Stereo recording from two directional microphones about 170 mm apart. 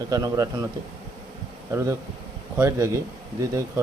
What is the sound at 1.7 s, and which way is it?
A man's voice, 20° right (ahead or behind).